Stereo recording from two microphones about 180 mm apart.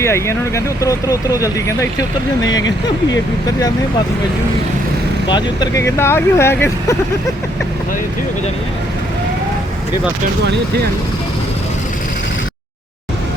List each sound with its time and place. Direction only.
0.0 s speech: 15° left (ahead or behind)
2.4 s speech: 90° left
5.3 s speech: 20° left (ahead or behind)